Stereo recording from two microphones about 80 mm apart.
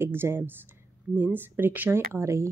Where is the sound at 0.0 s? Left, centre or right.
Right.